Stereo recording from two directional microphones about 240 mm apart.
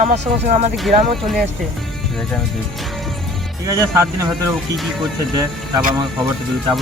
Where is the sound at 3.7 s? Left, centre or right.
Centre.